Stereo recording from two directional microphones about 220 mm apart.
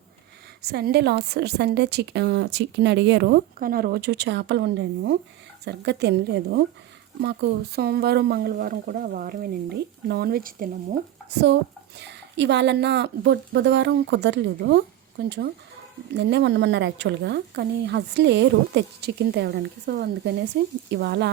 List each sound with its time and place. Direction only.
0.6 s a woman's voice: 45° right (ahead or behind)